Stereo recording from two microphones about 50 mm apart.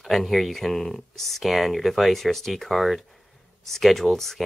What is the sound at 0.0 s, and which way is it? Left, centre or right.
Speech, centre.